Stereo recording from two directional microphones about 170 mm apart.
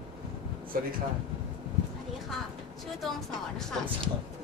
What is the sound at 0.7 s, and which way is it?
Speech, 55° right (ahead or behind).